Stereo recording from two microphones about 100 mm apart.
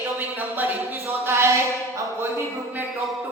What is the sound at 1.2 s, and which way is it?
Music, 30° right (ahead or behind).